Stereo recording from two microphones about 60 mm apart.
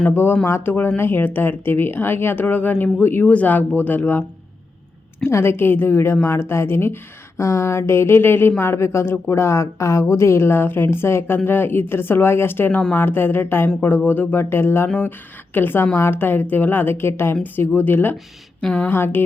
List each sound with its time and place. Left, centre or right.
0.1 s speech: left
5.3 s speech: left
18.6 s speech: centre
18.9 s speech: left